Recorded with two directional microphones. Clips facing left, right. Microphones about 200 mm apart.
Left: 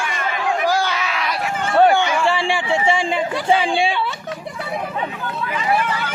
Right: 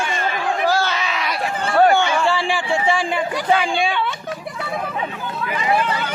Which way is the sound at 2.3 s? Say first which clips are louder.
Left 1 dB; 25° left (ahead or behind).